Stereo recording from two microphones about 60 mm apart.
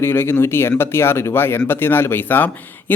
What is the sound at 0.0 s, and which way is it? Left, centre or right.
Speech, left.